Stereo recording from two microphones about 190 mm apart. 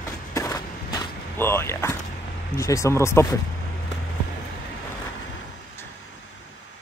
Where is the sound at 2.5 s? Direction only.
15° left (ahead or behind).